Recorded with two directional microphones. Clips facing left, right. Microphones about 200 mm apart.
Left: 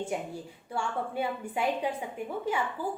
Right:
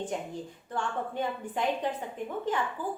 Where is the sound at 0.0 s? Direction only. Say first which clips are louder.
Left 1 dB; 10° left (ahead or behind).